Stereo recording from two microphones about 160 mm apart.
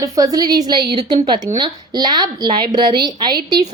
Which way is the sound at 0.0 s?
20° right (ahead or behind).